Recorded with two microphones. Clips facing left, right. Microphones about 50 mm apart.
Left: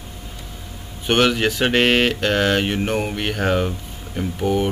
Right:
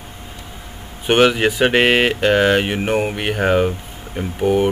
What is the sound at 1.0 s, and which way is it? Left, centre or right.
Speech, centre.